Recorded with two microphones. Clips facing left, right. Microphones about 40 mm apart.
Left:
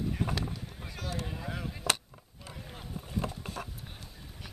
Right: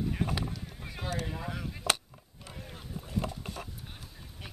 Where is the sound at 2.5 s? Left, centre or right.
Centre.